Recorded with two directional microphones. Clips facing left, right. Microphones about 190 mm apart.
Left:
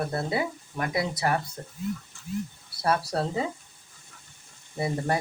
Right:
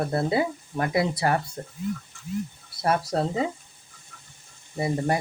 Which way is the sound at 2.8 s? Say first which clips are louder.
Right 2 dB; 20° right (ahead or behind).